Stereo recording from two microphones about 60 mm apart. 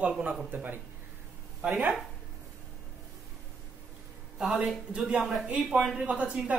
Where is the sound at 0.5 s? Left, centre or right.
Right.